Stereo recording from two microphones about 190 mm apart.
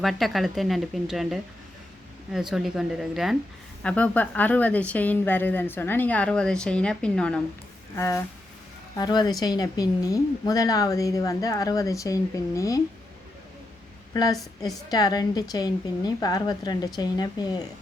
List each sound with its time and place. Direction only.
0.0 s a woman's voice: centre (ahead or behind); by 12.8 s 15° left (ahead or behind)
14.1 s a woman's voice: 20° left (ahead or behind)